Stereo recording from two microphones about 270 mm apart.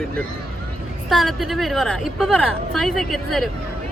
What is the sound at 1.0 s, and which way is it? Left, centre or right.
Speech, centre.